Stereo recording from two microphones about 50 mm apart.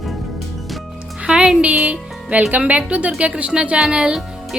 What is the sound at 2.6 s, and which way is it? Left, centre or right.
Speech, right.